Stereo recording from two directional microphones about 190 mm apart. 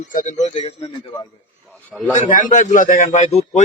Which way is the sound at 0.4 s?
30° left (ahead or behind).